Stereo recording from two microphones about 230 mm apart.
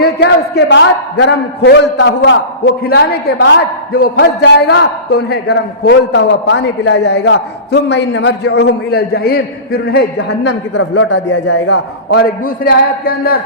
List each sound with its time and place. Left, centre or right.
0.0 s a man's voice: left